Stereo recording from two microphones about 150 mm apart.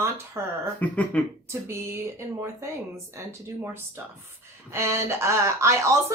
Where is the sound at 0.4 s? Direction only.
20° right (ahead or behind).